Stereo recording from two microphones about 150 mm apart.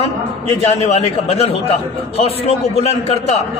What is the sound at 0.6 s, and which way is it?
A man's voice, 45° left (ahead or behind).